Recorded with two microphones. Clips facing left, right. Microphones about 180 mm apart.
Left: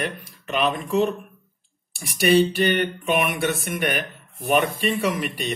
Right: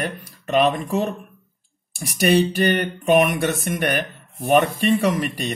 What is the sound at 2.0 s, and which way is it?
Speech, 45° right (ahead or behind).